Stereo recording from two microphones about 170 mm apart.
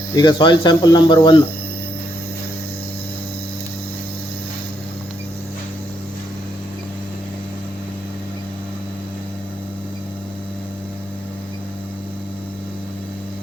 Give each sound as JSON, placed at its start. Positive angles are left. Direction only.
{"t": 0.2, "sound": "speech", "side_deg": 25}